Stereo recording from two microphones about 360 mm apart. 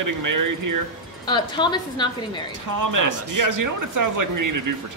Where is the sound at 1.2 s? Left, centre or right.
Centre.